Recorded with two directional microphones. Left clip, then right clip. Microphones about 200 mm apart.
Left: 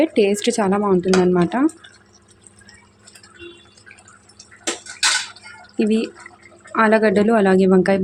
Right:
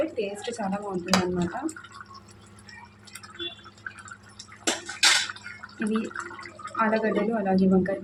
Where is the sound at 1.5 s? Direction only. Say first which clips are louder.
Left 13 dB; 55° left (ahead or behind).